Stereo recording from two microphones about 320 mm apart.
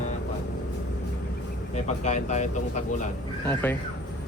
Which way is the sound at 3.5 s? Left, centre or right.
Centre.